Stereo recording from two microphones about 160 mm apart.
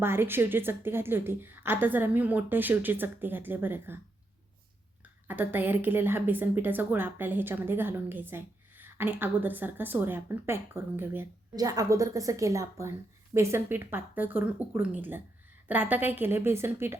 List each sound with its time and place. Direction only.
0.0 s a woman's voice: 15° right (ahead or behind)
5.3 s a woman's voice: 10° right (ahead or behind)
11.5 s a woman's voice: 25° right (ahead or behind)